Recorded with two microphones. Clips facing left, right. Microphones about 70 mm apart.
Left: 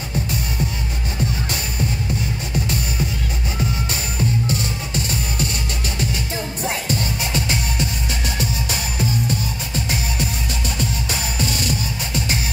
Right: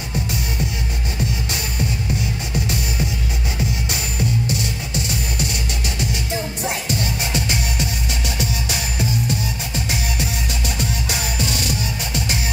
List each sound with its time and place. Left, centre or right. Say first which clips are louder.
4.5 s music: left 1 dB; left
6.7 s music: left 2 dB; left
11.6 s music: even; left